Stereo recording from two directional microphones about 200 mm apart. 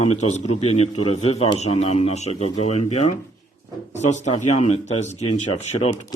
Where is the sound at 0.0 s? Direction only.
35° left (ahead or behind).